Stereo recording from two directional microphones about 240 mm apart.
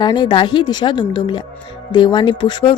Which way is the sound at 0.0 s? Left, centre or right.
Centre.